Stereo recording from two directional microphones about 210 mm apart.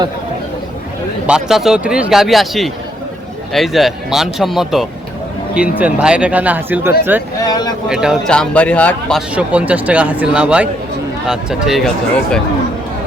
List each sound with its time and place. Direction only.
1.3 s speech: centre (ahead or behind)
7.4 s speech: 20° left (ahead or behind)
7.9 s speech: 5° right (ahead or behind)